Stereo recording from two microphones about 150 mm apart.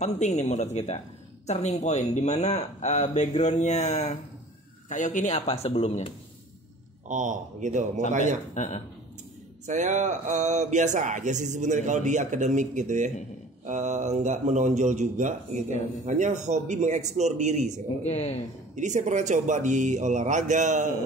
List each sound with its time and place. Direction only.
0.0 s speech: 50° left (ahead or behind)
7.1 s speech: 55° right (ahead or behind)
8.5 s speech: 50° left (ahead or behind)
9.7 s speech: 55° right (ahead or behind)
18.0 s speech: 45° left (ahead or behind)
18.8 s speech: 55° right (ahead or behind)